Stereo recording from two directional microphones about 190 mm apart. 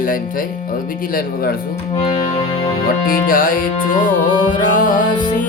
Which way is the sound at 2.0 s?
30° left (ahead or behind).